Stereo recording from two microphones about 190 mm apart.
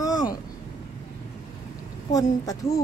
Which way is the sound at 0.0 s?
20° left (ahead or behind).